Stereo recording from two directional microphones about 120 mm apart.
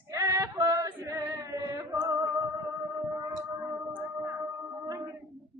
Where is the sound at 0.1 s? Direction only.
25° right (ahead or behind).